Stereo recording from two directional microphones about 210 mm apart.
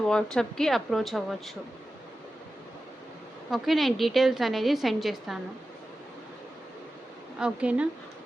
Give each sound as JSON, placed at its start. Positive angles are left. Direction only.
{"t": 0.1, "sound": "a woman's voice", "side_deg": 5}
{"t": 3.5, "sound": "a woman's voice", "side_deg": 0}
{"t": 7.3, "sound": "a woman's voice", "side_deg": -5}